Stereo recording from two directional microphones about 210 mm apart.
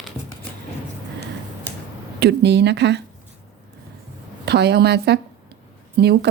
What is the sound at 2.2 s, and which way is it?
Speech, 55° right (ahead or behind).